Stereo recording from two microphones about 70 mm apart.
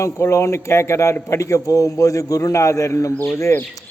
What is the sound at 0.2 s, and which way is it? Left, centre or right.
A man's voice, left.